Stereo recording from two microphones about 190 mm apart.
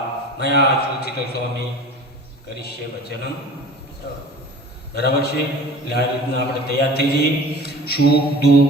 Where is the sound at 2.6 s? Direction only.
55° left (ahead or behind).